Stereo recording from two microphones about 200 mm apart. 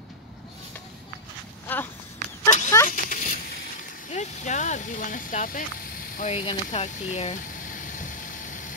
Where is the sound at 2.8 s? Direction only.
40° left (ahead or behind).